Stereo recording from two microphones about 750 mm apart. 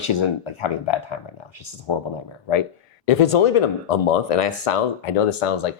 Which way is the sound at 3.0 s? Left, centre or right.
Left.